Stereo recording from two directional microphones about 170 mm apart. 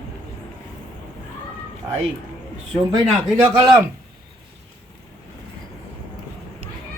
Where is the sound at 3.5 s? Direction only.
20° right (ahead or behind).